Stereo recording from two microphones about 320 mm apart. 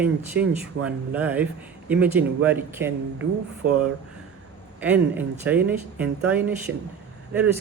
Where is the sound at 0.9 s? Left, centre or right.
Centre.